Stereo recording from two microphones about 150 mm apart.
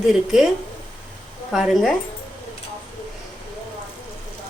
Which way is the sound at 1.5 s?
Centre (ahead or behind).